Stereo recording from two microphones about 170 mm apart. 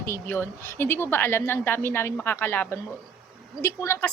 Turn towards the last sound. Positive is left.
turn(degrees=15)  # may be behind; listen again after turning